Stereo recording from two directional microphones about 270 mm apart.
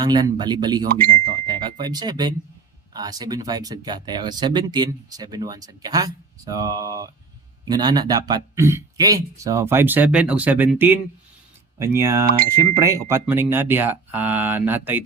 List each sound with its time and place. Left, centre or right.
0.0 s speech: centre